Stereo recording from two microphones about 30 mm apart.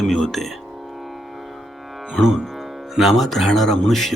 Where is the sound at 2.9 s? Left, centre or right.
Centre.